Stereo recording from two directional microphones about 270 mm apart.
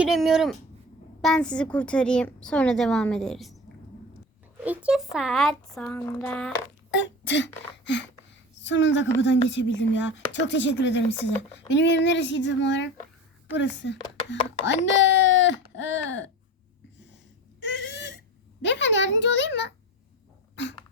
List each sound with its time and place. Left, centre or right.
0.0 s a woman's voice: centre
4.6 s a woman's voice: centre
6.9 s a sound: left
7.9 s a woman's voice: left
17.6 s a sound: left
18.6 s speech: left
20.6 s beatboxing: left